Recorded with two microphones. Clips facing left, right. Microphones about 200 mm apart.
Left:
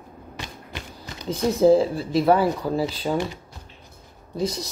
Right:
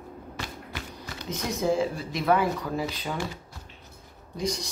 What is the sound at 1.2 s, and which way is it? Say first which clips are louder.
Speech: left 10 dB; 30° left (ahead or behind).